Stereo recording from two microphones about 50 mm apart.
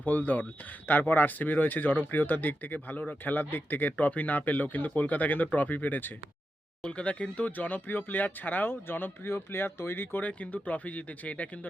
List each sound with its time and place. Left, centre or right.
0.0 s speech: left
6.8 s speech: left
10.2 s speech: left